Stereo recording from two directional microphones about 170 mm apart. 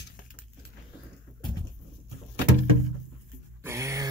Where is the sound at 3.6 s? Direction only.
15° right (ahead or behind).